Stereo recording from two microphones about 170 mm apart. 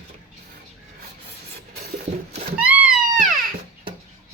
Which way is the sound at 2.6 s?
10° right (ahead or behind).